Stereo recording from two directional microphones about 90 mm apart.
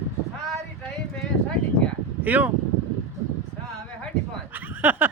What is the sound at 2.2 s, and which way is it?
Speech, 20° right (ahead or behind).